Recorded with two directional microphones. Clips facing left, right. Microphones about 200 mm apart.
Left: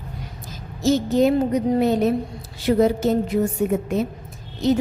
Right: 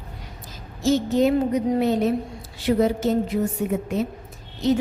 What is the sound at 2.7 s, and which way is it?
Speech, 45° left (ahead or behind).